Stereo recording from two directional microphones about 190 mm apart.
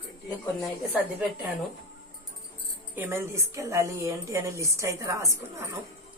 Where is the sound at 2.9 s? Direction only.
10° right (ahead or behind).